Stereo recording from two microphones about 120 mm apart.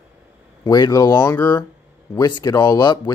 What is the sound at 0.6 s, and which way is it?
Speech, 35° left (ahead or behind).